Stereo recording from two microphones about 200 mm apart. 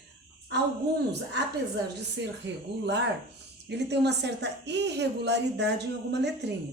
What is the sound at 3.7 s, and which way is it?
A woman's voice, 60° right (ahead or behind).